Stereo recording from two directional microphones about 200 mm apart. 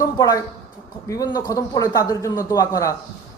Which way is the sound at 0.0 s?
15° left (ahead or behind).